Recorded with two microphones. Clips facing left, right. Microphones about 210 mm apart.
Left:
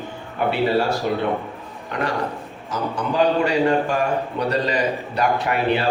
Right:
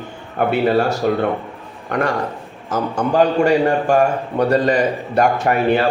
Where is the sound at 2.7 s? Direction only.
50° right (ahead or behind).